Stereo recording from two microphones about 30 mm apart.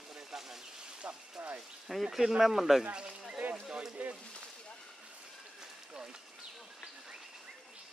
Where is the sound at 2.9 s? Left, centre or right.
Right.